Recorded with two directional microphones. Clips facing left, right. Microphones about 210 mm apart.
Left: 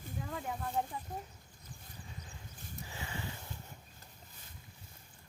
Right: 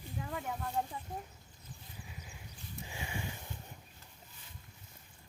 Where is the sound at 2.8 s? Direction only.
15° right (ahead or behind).